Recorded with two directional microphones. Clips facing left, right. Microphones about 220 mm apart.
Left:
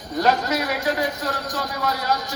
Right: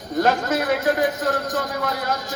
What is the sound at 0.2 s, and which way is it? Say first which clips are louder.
A man's voice: right 1 dB; 50° right (ahead or behind).